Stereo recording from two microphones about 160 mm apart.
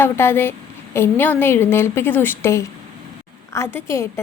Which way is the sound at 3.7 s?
15° left (ahead or behind).